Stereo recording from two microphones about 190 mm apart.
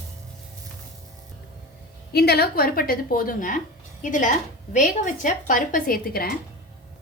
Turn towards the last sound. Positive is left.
turn(degrees=50)  # may be behind; listen again after turning